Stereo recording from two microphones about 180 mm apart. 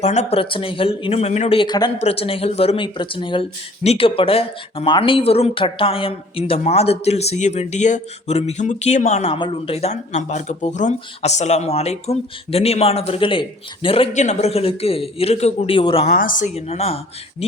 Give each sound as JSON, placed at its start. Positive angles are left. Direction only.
{"t": 0.0, "sound": "speech", "side_deg": 35}
{"t": 16.0, "sound": "speech", "side_deg": 50}
{"t": 16.6, "sound": "speech", "side_deg": 35}